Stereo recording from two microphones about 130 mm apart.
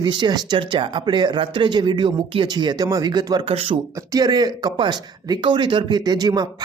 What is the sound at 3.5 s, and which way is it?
Speech, 45° right (ahead or behind).